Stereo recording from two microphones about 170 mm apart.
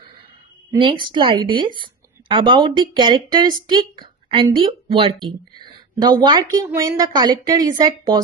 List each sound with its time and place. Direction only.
0.8 s a woman's voice: 30° right (ahead or behind)